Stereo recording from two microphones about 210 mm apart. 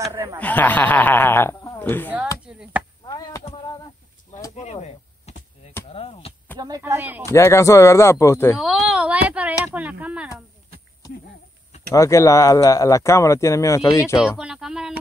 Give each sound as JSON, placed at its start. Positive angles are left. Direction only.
{"t": 0.0, "sound": "speech", "side_deg": -15}
{"t": 0.4, "sound": "speech", "side_deg": 10}
{"t": 2.4, "sound": "chop", "side_deg": -5}
{"t": 3.1, "sound": "chop", "side_deg": 20}
{"t": 4.6, "sound": "a sound", "side_deg": 30}
{"t": 5.9, "sound": "chop", "side_deg": 25}
{"t": 6.6, "sound": "speech", "side_deg": -15}
{"t": 7.2, "sound": "speech", "side_deg": 10}
{"t": 8.5, "sound": "a sound", "side_deg": -5}
{"t": 9.7, "sound": "speech", "side_deg": -5}
{"t": 11.9, "sound": "speech", "side_deg": 15}
{"t": 14.4, "sound": "speech", "side_deg": -5}